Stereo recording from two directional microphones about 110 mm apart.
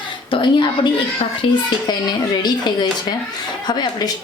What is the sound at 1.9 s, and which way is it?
Speech, 40° left (ahead or behind).